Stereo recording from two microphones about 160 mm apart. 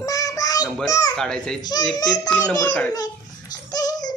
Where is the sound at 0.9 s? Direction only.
20° left (ahead or behind).